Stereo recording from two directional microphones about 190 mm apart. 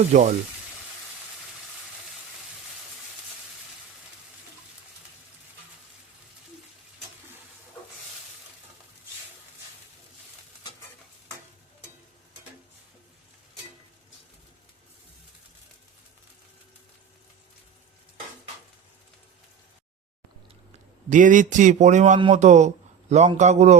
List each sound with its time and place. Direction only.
0.1 s speech: 40° right (ahead or behind)
21.1 s a man's voice: 45° right (ahead or behind)